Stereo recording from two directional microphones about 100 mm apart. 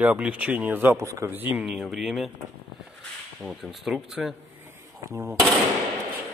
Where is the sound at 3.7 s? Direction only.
5° right (ahead or behind).